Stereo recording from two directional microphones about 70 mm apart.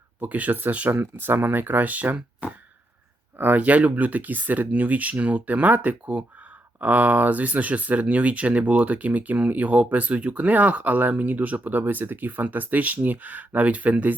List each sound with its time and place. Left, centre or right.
0.2 s speech: right
3.3 s speech: right